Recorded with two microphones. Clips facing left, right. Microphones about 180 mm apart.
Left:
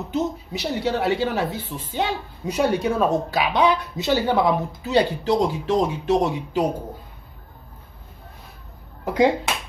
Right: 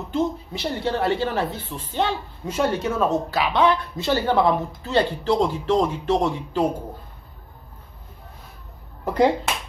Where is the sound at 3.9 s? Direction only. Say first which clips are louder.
Even; 5° left (ahead or behind).